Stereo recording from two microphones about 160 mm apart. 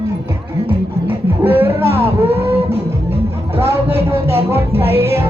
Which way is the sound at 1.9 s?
40° right (ahead or behind).